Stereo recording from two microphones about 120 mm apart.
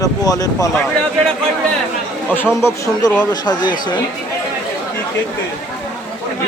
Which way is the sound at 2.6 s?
20° left (ahead or behind).